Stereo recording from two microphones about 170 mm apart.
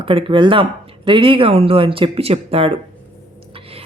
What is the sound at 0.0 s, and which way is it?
A man's voice, 30° right (ahead or behind).